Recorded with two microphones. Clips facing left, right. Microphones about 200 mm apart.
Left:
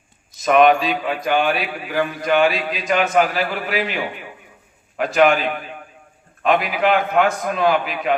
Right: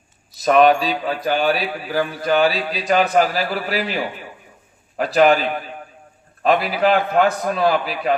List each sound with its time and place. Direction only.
0.3 s a man's voice: 35° right (ahead or behind)